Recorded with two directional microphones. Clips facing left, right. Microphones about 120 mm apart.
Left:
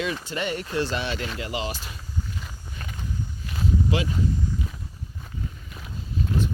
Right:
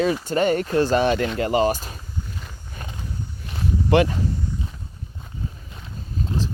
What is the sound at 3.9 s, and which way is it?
Speech, 60° right (ahead or behind).